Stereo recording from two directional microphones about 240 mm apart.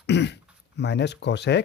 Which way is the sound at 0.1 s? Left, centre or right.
Left.